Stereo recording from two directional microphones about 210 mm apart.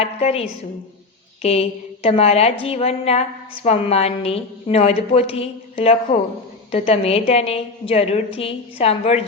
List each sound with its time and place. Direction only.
0.0 s a woman's voice: 30° left (ahead or behind)